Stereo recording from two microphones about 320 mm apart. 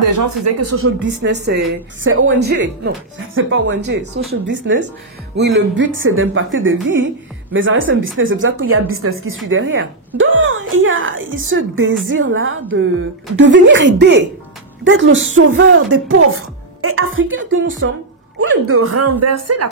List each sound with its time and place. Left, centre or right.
0.0 s speech: right